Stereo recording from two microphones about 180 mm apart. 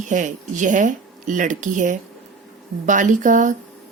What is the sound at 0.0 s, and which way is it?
Speech, 45° right (ahead or behind).